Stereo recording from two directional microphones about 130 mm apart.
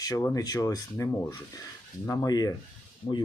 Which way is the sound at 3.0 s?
40° left (ahead or behind).